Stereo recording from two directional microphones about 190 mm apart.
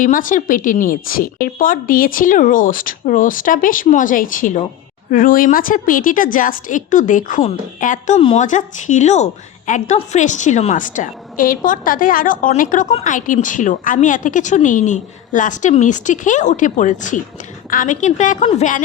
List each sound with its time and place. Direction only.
0.0 s a woman's voice: 45° left (ahead or behind)
12.9 s speech: 30° left (ahead or behind)
13.1 s speech: 45° left (ahead or behind)